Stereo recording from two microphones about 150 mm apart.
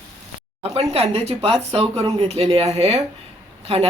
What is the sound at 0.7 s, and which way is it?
Speech, 40° right (ahead or behind).